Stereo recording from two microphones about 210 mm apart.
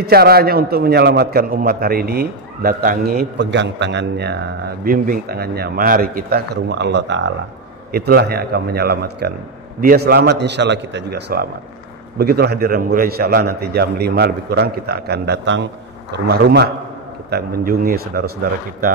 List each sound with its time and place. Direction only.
0.0 s a man's voice: 50° right (ahead or behind)